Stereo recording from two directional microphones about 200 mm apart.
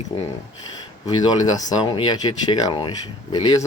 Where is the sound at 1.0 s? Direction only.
20° left (ahead or behind).